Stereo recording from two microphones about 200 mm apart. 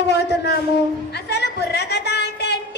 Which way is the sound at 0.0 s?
55° left (ahead or behind).